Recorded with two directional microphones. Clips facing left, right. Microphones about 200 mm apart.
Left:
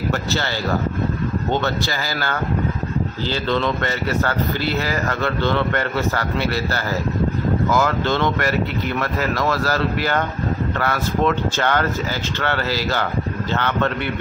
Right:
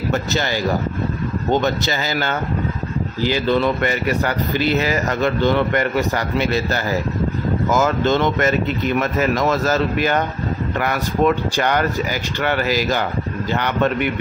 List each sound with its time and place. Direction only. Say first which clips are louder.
0.1 s speech: right 2 dB; 15° right (ahead or behind)